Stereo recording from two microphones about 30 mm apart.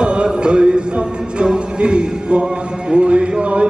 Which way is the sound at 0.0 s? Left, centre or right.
Right.